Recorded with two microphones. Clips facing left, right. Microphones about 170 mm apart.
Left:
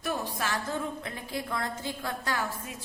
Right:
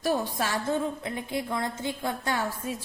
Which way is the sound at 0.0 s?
30° right (ahead or behind).